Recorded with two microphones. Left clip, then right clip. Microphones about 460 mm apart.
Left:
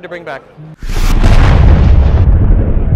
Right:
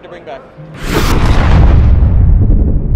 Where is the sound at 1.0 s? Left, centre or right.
Centre.